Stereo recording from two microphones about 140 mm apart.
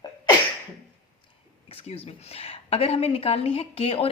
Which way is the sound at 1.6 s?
45° left (ahead or behind).